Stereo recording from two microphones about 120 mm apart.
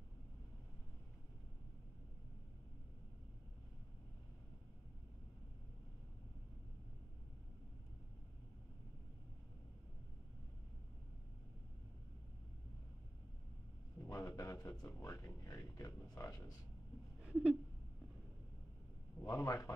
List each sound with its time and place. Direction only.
14.0 s speech: 30° left (ahead or behind)
17.2 s a sound: 10° right (ahead or behind)
19.2 s speech: 25° left (ahead or behind)